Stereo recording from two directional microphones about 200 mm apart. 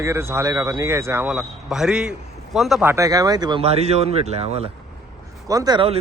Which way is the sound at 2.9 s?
15° right (ahead or behind).